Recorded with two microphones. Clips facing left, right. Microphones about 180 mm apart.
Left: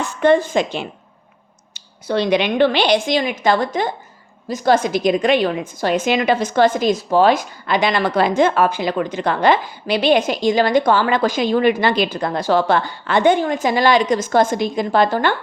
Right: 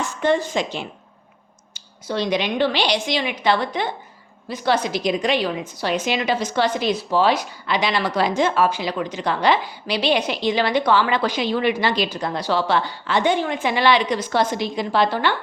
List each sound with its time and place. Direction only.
0.0 s a woman's voice: 55° left (ahead or behind)